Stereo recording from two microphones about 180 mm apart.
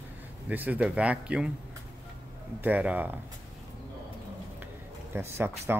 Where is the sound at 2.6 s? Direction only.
10° right (ahead or behind).